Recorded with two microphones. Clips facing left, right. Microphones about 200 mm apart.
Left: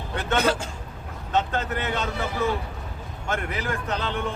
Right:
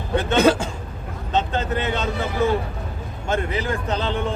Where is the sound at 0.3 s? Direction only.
90° right.